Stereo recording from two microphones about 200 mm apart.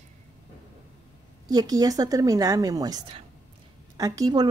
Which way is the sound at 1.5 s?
20° right (ahead or behind).